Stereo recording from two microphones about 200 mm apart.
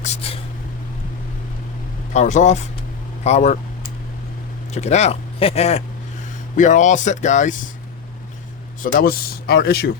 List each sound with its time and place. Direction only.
0.0 s a sound: 30° left (ahead or behind)
2.1 s speech: 35° left (ahead or behind)
4.7 s speech: 35° left (ahead or behind)
8.8 s speech: 45° left (ahead or behind)